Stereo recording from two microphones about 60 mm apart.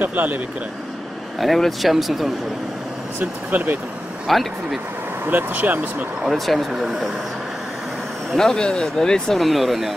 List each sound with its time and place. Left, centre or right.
0.0 s speech: right
1.4 s speech: centre
3.2 s speech: right
4.3 s speech: centre
5.2 s speech: right
6.2 s speech: centre
8.4 s speech: centre